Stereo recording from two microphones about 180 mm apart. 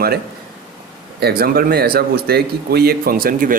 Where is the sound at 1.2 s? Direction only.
60° right (ahead or behind).